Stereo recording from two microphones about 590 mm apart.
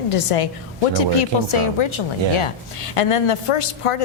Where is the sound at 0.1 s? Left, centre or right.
Left.